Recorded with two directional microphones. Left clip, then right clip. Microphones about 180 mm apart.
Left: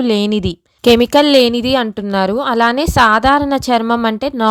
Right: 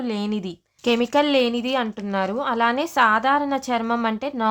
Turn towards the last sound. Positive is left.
turn(degrees=45)  # may be behind; listen again after turning